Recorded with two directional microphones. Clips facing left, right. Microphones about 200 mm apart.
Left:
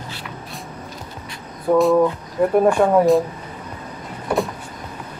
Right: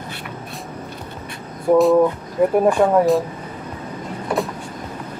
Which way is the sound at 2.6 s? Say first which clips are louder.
Left 2 dB; centre (ahead or behind).